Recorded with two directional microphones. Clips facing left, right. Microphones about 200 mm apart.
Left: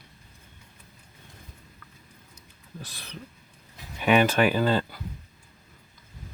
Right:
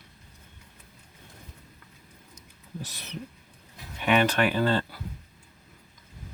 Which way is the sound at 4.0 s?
10° left (ahead or behind).